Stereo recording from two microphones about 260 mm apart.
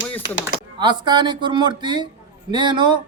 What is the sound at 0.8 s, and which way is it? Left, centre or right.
Speech, centre.